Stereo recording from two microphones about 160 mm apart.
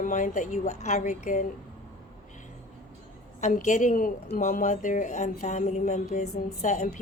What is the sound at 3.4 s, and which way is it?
Speech, 50° left (ahead or behind).